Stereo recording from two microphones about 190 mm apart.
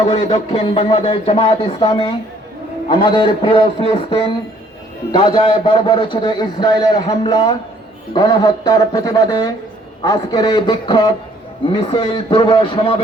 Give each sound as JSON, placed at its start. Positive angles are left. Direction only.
{"t": 0.3, "sound": "a man's voice", "side_deg": 30}